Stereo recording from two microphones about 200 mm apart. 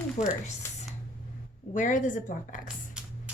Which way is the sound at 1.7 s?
40° left (ahead or behind).